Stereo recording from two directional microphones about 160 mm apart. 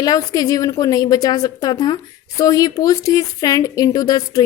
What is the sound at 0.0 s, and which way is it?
A woman's voice, 25° left (ahead or behind).